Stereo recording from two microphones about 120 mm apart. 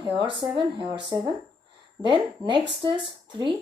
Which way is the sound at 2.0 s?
40° right (ahead or behind).